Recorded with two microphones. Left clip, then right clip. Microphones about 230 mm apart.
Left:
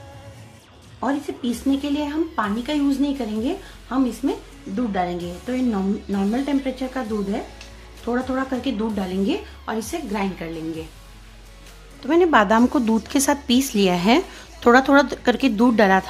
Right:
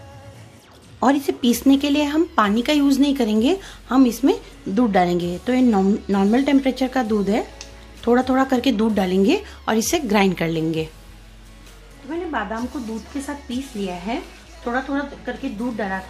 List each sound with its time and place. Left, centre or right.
0.9 s speech: right
12.1 s speech: left